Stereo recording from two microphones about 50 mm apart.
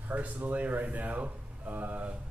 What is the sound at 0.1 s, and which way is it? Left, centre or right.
A man's voice, right.